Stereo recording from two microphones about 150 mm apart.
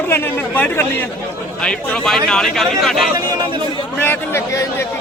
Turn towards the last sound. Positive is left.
turn(degrees=20)  # may be behind; listen again after turning